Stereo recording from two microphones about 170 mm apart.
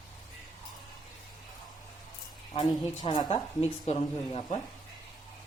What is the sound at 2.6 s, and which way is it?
Speech, 25° left (ahead or behind).